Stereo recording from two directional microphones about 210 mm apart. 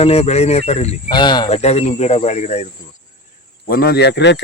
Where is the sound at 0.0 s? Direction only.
30° left (ahead or behind).